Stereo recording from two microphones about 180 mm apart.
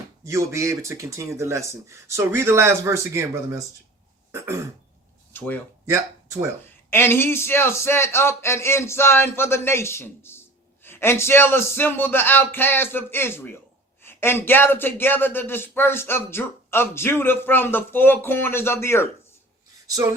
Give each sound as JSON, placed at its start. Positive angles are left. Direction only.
{"t": 0.3, "sound": "speech", "side_deg": -15}
{"t": 4.3, "sound": "throat clearing", "side_deg": -15}
{"t": 5.3, "sound": "a sound", "side_deg": 10}
{"t": 6.9, "sound": "speech", "side_deg": 10}